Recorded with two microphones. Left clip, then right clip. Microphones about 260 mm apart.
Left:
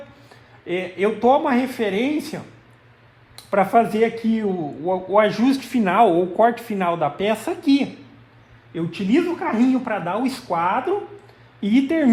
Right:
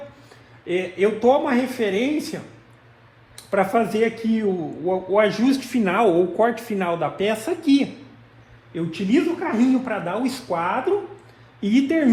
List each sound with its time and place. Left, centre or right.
0.3 s a man's voice: left
3.5 s a man's voice: left